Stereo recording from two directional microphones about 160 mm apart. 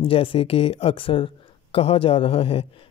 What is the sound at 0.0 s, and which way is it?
Speech, 35° left (ahead or behind).